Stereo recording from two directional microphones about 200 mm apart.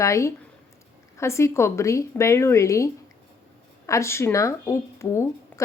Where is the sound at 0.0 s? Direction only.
15° left (ahead or behind).